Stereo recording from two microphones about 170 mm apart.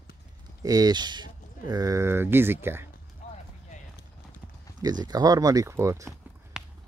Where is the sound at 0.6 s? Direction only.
20° right (ahead or behind).